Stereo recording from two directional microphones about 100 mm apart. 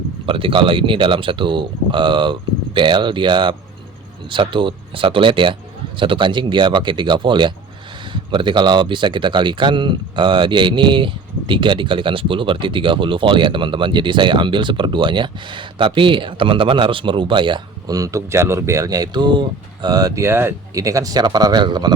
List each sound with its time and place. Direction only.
0.3 s speech: 60° right (ahead or behind)
17.9 s speech: 35° right (ahead or behind)
20.2 s speech: 25° right (ahead or behind)
20.7 s speech: 35° right (ahead or behind)